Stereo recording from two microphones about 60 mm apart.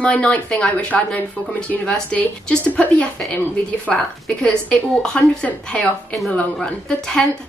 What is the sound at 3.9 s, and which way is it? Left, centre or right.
A woman's voice, centre.